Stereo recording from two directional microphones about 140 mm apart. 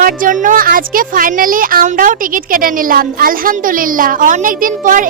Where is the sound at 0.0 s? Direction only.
75° right (ahead or behind).